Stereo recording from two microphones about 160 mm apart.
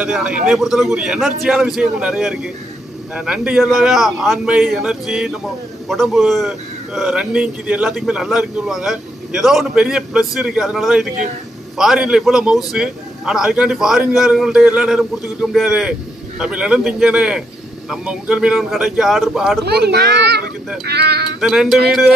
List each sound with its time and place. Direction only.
0.0 s a man's voice: 5° right (ahead or behind)
19.6 s a child's voice: 90° right
21.4 s a man's voice: centre (ahead or behind)